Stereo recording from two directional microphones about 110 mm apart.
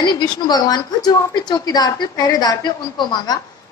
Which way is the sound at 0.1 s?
40° left (ahead or behind).